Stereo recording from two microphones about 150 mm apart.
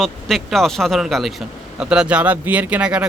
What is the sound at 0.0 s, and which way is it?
Speech, centre (ahead or behind).